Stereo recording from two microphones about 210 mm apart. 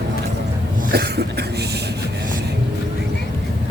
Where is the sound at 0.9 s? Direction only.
50° right (ahead or behind).